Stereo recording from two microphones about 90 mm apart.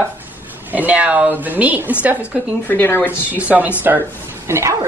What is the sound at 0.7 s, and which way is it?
Speech, 15° right (ahead or behind).